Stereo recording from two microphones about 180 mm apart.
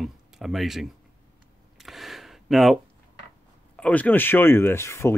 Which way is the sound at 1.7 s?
Centre (ahead or behind).